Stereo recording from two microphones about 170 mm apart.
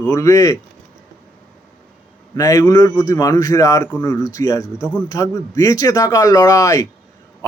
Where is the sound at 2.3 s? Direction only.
20° left (ahead or behind).